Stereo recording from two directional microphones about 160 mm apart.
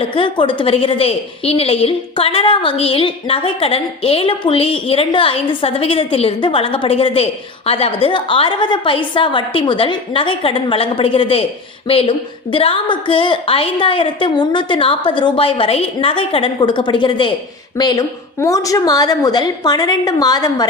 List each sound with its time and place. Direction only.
0.1 s a woman's voice: 30° left (ahead or behind)